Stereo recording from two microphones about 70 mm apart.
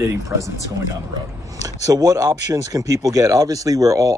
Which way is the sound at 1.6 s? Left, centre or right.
Right.